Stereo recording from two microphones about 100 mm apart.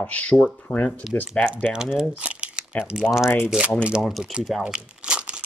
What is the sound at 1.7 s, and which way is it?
Speech, 5° right (ahead or behind).